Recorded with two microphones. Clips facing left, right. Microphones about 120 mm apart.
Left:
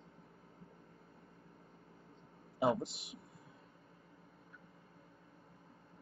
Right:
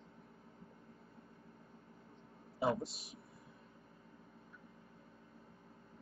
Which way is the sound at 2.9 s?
70° left (ahead or behind).